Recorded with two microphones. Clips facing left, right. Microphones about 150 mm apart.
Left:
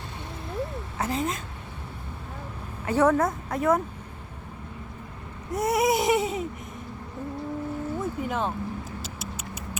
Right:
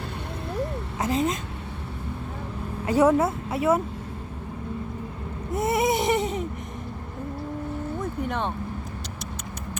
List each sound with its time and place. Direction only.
0.9 s a sound: 15° right (ahead or behind)
2.8 s speech: 10° right (ahead or behind)
5.5 s baby cry: centre (ahead or behind)
8.2 s speech: 5° left (ahead or behind)